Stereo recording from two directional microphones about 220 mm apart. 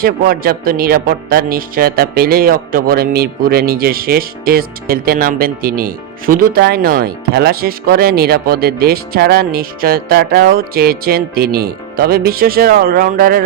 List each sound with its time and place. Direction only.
0.0 s speech: 40° right (ahead or behind)